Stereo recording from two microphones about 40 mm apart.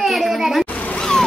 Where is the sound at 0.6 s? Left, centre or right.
Left.